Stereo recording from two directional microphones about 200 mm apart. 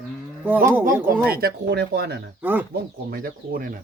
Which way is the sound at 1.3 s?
50° right (ahead or behind).